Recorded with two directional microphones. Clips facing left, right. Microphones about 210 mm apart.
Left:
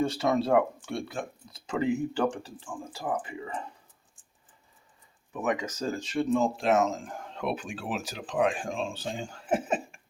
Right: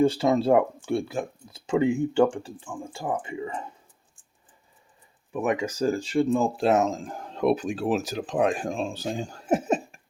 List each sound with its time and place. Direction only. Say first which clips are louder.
0.0 s speech: right 5 dB; 30° right (ahead or behind)
5.3 s speech: right 4 dB; 30° right (ahead or behind)